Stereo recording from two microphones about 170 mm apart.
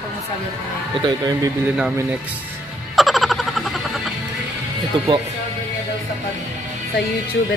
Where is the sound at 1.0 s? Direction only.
25° right (ahead or behind).